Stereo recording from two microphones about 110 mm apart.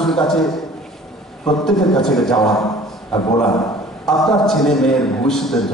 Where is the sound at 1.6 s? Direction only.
5° left (ahead or behind).